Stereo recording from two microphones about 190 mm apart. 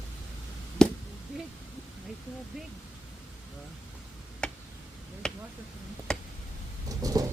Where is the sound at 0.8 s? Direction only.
5° left (ahead or behind).